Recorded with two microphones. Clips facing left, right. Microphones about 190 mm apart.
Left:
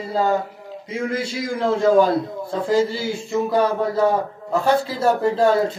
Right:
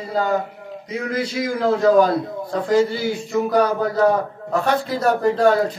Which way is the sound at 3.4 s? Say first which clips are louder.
Right 1 dB; 25° left (ahead or behind).